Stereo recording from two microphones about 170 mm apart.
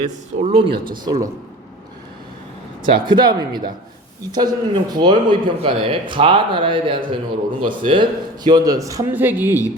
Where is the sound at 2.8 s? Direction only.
25° right (ahead or behind).